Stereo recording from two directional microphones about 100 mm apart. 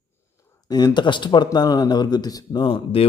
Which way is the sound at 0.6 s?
45° left (ahead or behind).